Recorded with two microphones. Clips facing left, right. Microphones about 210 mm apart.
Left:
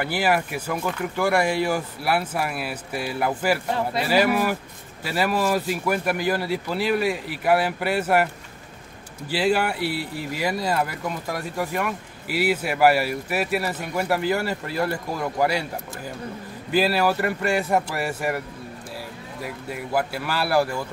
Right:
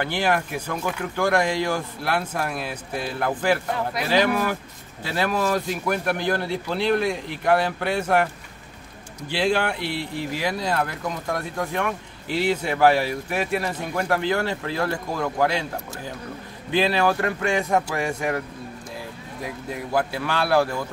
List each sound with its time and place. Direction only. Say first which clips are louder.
0.0 s speech: left 1 dB; 5° left (ahead or behind)
9.3 s speech: left 1 dB; 5° left (ahead or behind)
16.7 s speech: even; 5° left (ahead or behind)
19.4 s speech: right 1 dB; 5° left (ahead or behind)